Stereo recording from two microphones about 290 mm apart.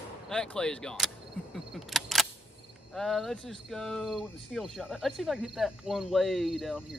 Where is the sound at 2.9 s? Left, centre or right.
Centre.